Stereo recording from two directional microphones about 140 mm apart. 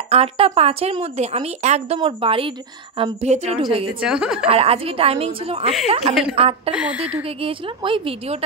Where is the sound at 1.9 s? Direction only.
40° right (ahead or behind).